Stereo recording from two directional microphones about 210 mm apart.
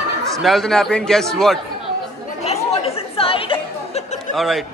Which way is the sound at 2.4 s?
30° left (ahead or behind).